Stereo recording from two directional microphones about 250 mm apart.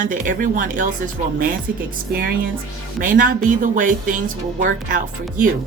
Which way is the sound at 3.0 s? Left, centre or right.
Right.